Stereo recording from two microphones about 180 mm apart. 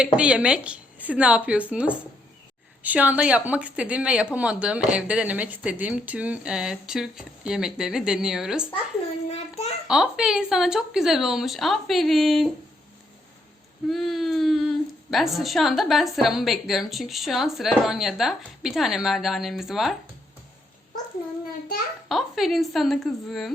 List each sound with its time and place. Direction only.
0.0 s speech: 5° right (ahead or behind)
9.3 s a child's voice: 35° left (ahead or behind)
9.8 s a woman's voice: 5° right (ahead or behind)
13.8 s a woman's voice: centre (ahead or behind)
22.1 s a woman's voice: centre (ahead or behind)